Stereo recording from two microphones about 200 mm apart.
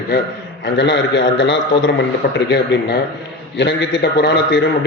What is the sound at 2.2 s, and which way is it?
Speech, 45° left (ahead or behind).